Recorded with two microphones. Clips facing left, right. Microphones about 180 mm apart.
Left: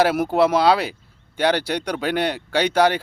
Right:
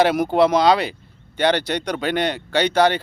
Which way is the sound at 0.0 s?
5° left (ahead or behind).